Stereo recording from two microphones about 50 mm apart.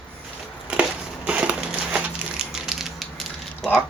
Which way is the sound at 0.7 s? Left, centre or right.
Right.